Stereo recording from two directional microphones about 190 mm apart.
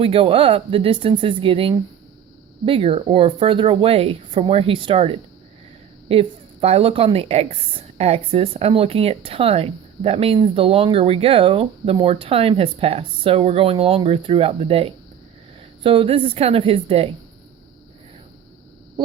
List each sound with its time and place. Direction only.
0.0 s a woman's voice: 30° right (ahead or behind)